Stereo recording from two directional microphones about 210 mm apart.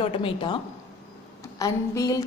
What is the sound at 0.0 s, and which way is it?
Speech, 25° left (ahead or behind).